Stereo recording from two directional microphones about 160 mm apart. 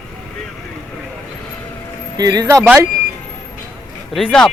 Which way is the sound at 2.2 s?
25° right (ahead or behind).